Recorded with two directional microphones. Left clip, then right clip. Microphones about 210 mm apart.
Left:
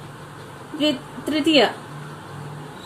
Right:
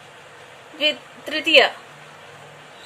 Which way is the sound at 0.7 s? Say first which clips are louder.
Right 1 dB; 35° right (ahead or behind).